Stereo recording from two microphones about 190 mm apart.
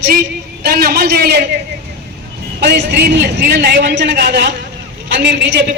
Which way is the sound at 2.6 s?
60° right (ahead or behind).